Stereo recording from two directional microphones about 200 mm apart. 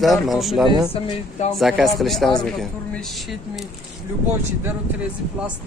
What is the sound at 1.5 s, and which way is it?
Speech, centre (ahead or behind).